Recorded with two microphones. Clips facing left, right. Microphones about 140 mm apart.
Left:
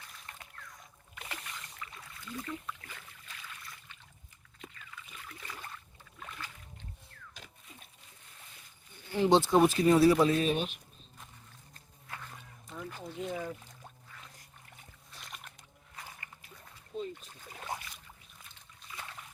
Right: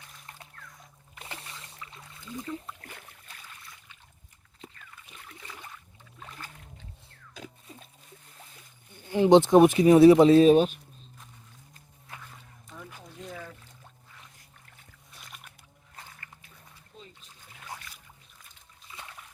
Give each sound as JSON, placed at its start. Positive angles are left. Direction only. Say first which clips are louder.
{"t": 1.1, "sound": "rowboat", "louder": "right 1 dB", "side_deg": -30}
{"t": 2.8, "sound": "boat", "louder": "right 3 dB", "side_deg": -50}
{"t": 3.4, "sound": "boat", "louder": "left 1 dB", "side_deg": -15}
{"t": 5.1, "sound": "boat", "louder": "even", "side_deg": -20}
{"t": 9.1, "sound": "speech", "louder": "right 7 dB", "side_deg": -20}
{"t": 12.6, "sound": "a sound", "louder": "left 4 dB", "side_deg": 5}
{"t": 13.3, "sound": "a sound", "louder": "left 4 dB", "side_deg": 15}
{"t": 15.2, "sound": "music", "louder": "left 1 dB", "side_deg": 0}
{"t": 17.2, "sound": "trickle", "louder": "left 4 dB", "side_deg": 40}
{"t": 18.9, "sound": "a sound", "louder": "even", "side_deg": -25}